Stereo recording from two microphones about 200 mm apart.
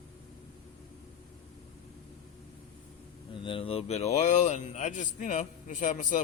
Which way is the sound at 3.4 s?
25° left (ahead or behind).